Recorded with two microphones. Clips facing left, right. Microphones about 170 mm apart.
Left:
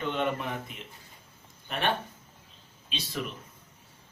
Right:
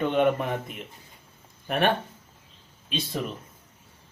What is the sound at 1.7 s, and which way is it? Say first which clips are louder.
Speech: right 9 dB; 60° right (ahead or behind).